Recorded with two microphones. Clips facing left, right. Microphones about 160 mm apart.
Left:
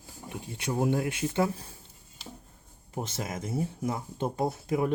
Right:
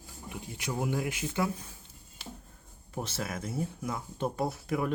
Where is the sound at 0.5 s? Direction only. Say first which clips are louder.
Left 5 dB; 30° left (ahead or behind).